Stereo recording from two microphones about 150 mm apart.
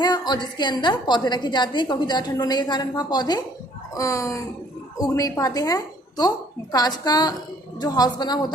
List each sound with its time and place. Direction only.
0.0 s a woman's voice: 30° left (ahead or behind)